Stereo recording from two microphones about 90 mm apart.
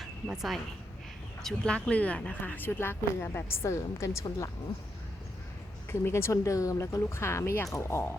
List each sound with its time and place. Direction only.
0.0 s speech: centre (ahead or behind); by 4.4 s 35° left (ahead or behind)
5.9 s speech: 30° left (ahead or behind)